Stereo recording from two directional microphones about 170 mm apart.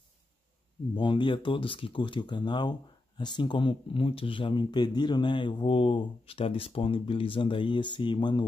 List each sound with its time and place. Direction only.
0.9 s speech: 30° left (ahead or behind)